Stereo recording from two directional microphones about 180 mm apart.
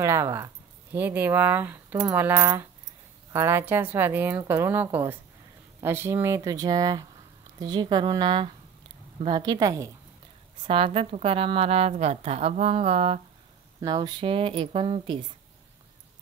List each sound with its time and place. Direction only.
0.0 s speech: 15° right (ahead or behind)
10.6 s a woman's voice: 30° right (ahead or behind)
13.7 s speech: 20° right (ahead or behind)